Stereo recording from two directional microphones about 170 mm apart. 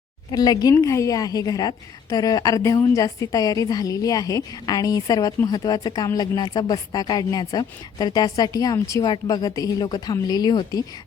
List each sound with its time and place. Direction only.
0.3 s a woman's voice: 25° left (ahead or behind)